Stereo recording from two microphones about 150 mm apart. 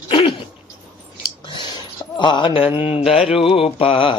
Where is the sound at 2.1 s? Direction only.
30° left (ahead or behind).